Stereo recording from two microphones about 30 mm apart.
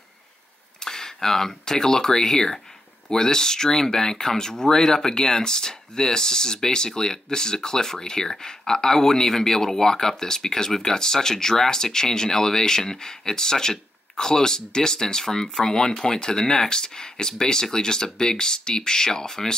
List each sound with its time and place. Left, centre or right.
0.7 s speech: centre